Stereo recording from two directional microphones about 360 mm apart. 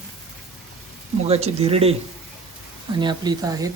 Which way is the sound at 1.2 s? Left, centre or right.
Centre.